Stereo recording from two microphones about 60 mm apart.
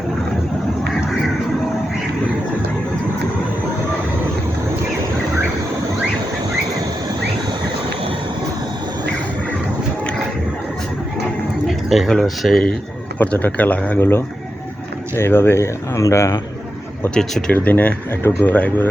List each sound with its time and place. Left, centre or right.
11.6 s a sound: centre
12.2 s speech: centre
13.1 s speech: left
15.1 s speech: left
17.2 s speech: centre
17.5 s speech: left